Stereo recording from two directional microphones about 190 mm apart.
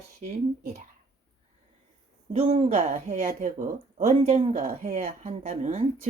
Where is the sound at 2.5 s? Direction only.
35° right (ahead or behind).